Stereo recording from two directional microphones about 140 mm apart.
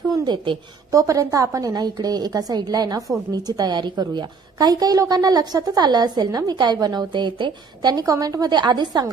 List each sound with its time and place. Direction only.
0.1 s a woman's voice: 30° right (ahead or behind)